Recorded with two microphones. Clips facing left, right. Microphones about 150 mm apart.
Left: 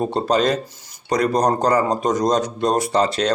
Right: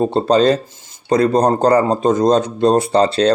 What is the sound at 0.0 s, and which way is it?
A man's voice, 30° right (ahead or behind).